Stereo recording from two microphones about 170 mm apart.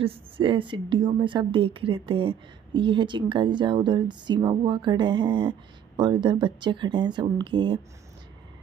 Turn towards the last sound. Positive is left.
turn(degrees=-25)  # may be behind; listen again after turning